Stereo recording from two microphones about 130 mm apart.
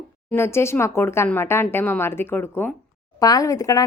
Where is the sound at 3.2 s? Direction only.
30° left (ahead or behind).